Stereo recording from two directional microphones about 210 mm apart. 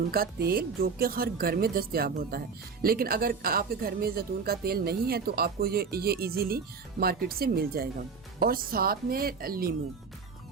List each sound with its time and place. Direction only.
0.1 s speech: 45° right (ahead or behind)